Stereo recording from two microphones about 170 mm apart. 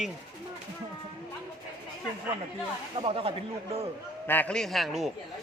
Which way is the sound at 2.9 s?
35° right (ahead or behind).